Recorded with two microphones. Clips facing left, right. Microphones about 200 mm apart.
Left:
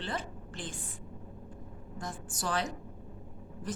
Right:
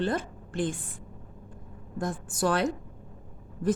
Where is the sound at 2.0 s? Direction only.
55° right (ahead or behind).